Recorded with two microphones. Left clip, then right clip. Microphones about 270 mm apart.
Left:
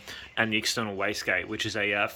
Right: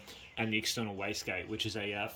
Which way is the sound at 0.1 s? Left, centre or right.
Centre.